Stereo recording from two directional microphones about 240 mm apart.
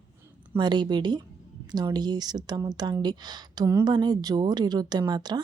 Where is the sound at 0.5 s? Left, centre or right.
Centre.